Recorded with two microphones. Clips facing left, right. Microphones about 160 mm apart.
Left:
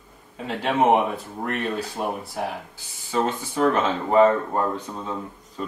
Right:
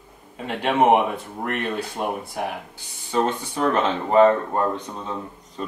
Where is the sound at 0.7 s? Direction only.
15° right (ahead or behind).